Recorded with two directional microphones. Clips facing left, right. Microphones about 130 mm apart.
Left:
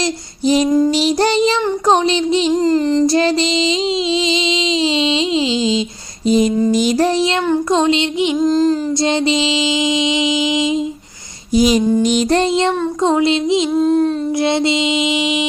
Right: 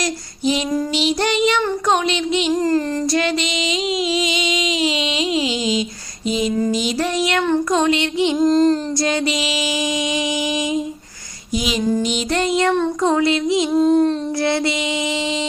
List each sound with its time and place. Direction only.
0.4 s child singing: 40° left (ahead or behind); by 3.2 s 20° left (ahead or behind)
3.2 s child singing: 30° left (ahead or behind)
4.1 s a sound: 25° left (ahead or behind)
6.2 s a sound: 40° left (ahead or behind)
6.7 s music: 45° left (ahead or behind)
7.7 s mantra: 25° left (ahead or behind)
8.4 s music: centre (ahead or behind)
9.0 s mantra: 25° left (ahead or behind)
11.5 s child singing: 40° left (ahead or behind)
12.0 s music: 45° left (ahead or behind)
12.4 s mantra: 25° left (ahead or behind)
13.7 s music: centre (ahead or behind)
14.4 s mantra: 20° left (ahead or behind)